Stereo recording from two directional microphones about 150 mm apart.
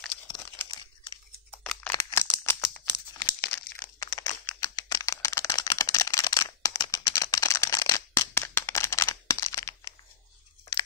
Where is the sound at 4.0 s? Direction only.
25° left (ahead or behind).